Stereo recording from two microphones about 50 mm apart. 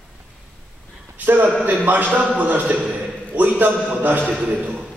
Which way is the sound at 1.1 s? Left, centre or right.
Right.